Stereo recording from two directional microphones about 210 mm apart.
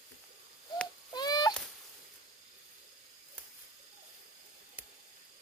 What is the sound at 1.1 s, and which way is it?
Wail, 20° left (ahead or behind).